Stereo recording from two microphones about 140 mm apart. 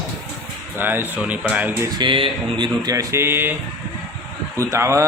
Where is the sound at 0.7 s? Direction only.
15° right (ahead or behind).